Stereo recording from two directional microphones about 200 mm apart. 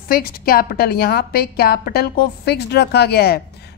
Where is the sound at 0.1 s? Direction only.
45° left (ahead or behind).